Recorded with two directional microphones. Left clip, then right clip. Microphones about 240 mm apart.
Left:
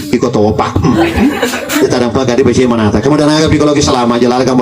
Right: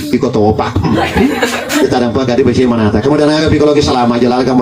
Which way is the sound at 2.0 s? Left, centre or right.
Left.